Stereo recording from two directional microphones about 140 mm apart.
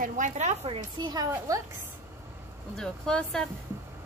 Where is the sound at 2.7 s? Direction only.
5° left (ahead or behind).